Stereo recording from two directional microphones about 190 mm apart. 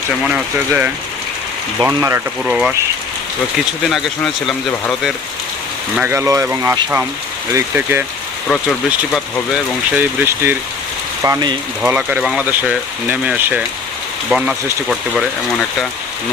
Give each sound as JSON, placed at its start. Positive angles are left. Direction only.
{"t": 0.3, "sound": "speech", "side_deg": -5}
{"t": 2.4, "sound": "speech", "side_deg": -5}
{"t": 3.8, "sound": "speech", "side_deg": 0}
{"t": 6.0, "sound": "speech", "side_deg": -10}
{"t": 9.9, "sound": "speech", "side_deg": -10}
{"t": 11.8, "sound": "speech", "side_deg": -5}